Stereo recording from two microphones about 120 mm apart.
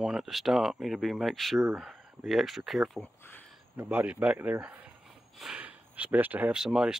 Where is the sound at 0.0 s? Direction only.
5° right (ahead or behind).